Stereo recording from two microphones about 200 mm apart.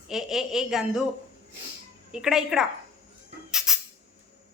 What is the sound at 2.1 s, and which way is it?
Speech, 5° right (ahead or behind).